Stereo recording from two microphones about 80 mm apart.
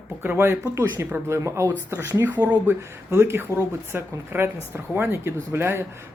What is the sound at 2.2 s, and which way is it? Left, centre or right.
Speech, right.